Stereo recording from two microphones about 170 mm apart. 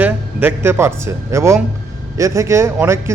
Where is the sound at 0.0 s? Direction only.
10° right (ahead or behind).